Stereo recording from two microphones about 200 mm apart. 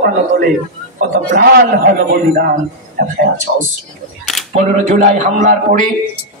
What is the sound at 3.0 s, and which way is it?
Speech, 50° right (ahead or behind).